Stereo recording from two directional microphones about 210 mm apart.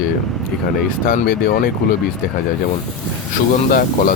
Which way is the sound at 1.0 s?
45° left (ahead or behind).